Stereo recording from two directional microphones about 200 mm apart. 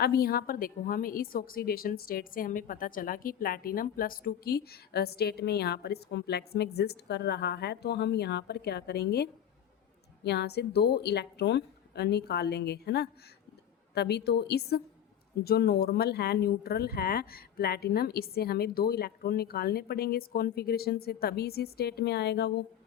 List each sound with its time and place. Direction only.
0.0 s a woman's voice: 50° left (ahead or behind)